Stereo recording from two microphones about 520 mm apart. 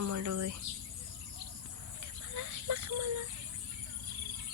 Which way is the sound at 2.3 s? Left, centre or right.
Right.